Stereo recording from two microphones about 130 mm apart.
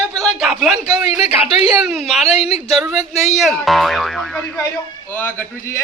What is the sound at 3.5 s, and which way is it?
Speech, centre (ahead or behind).